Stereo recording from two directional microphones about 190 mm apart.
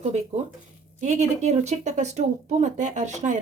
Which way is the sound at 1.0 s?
40° right (ahead or behind).